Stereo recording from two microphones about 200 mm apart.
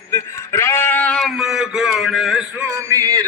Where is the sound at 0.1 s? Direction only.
15° left (ahead or behind); by 2.6 s centre (ahead or behind).